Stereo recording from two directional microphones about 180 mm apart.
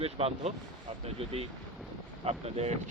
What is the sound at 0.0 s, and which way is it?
Speech, 35° right (ahead or behind).